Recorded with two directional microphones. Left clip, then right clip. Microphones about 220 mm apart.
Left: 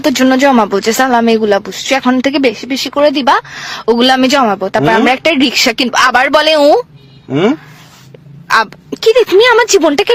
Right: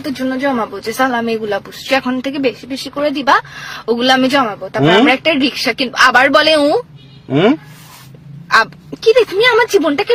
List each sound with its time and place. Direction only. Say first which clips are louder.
0.1 s speech: left 8 dB; 40° left (ahead or behind)
7.3 s speech: even; 5° left (ahead or behind)
8.4 s speech: left 1 dB; 40° left (ahead or behind)